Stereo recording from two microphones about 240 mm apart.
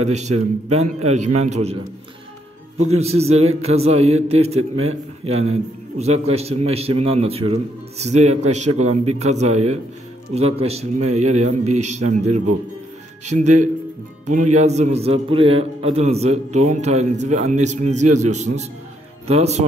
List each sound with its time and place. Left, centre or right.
0.0 s a man's voice: right
3.0 s a man's voice: right